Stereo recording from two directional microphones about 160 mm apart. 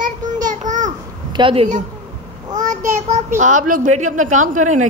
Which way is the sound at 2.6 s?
50° right (ahead or behind).